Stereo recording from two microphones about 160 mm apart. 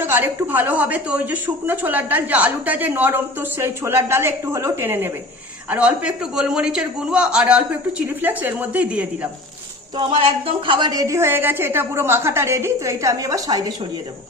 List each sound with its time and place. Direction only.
0.0 s a woman's voice: 15° right (ahead or behind)
10.0 s a woman's voice: 30° right (ahead or behind)